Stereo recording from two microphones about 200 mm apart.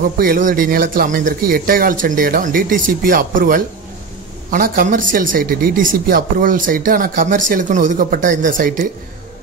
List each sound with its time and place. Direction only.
0.2 s speech: 45° right (ahead or behind)